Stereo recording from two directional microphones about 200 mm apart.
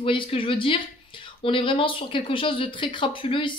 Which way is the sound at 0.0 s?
25° left (ahead or behind).